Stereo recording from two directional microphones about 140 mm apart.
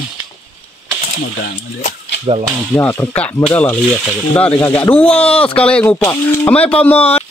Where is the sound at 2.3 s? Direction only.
45° right (ahead or behind).